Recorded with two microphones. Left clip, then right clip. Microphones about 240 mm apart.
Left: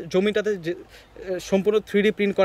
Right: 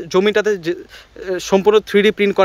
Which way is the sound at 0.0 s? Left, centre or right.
Centre.